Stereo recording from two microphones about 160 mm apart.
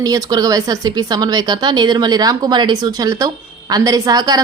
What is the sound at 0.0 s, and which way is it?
Speech, 20° right (ahead or behind).